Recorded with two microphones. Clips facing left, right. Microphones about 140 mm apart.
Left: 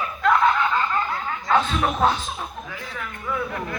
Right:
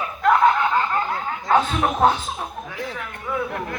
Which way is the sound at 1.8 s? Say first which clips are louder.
Right 2 dB; 25° right (ahead or behind).